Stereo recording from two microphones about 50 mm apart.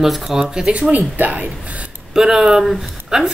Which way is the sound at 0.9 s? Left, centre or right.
Right.